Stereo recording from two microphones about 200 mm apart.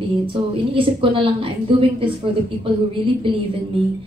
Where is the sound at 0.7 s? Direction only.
25° right (ahead or behind).